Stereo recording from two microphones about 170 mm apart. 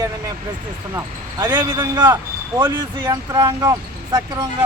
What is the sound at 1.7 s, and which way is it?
Speech, 25° right (ahead or behind).